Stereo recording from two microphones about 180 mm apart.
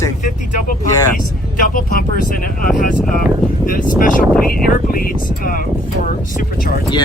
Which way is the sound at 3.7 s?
50° left (ahead or behind).